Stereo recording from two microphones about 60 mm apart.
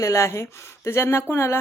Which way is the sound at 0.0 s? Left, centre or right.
Left.